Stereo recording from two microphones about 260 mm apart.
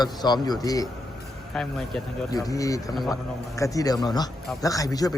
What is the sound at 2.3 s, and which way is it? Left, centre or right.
A man's voice, centre.